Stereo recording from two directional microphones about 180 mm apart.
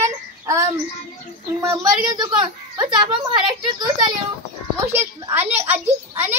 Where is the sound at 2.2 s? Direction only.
25° right (ahead or behind).